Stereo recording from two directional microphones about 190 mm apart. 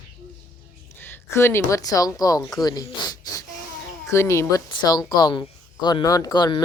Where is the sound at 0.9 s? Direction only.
10° left (ahead or behind).